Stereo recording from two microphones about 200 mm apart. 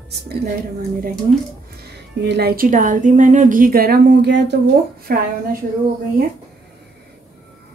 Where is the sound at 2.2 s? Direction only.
55° right (ahead or behind).